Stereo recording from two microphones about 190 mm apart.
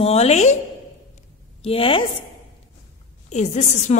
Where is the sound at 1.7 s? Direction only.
30° left (ahead or behind).